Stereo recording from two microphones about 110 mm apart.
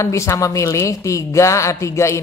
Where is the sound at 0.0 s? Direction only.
25° left (ahead or behind).